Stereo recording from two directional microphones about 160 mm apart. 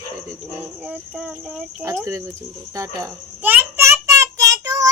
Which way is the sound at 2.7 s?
15° right (ahead or behind).